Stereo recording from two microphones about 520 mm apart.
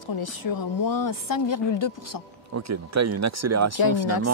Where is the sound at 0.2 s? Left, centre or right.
Left.